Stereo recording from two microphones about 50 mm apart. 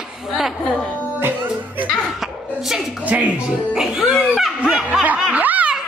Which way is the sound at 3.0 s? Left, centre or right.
Right.